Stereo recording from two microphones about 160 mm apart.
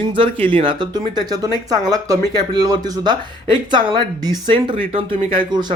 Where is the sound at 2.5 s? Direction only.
25° right (ahead or behind).